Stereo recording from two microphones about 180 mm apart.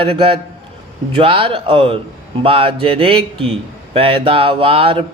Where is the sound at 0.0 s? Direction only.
30° right (ahead or behind).